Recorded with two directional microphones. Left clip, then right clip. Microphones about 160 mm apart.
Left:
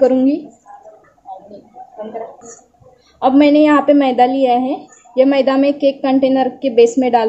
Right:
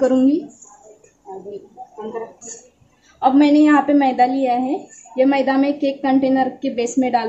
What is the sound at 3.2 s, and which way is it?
A woman's voice, 35° left (ahead or behind).